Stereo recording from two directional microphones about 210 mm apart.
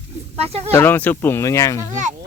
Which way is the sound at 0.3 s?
30° right (ahead or behind).